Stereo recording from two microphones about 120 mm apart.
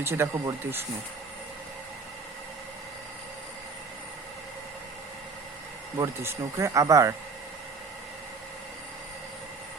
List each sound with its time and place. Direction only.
0.0 s speech: 20° right (ahead or behind)
6.0 s speech: 25° right (ahead or behind)